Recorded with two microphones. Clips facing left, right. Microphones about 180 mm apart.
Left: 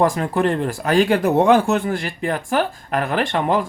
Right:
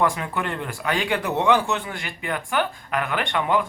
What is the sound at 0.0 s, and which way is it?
Speech, 40° left (ahead or behind).